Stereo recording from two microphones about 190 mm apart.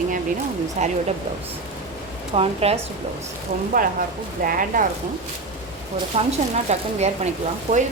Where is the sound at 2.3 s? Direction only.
30° right (ahead or behind).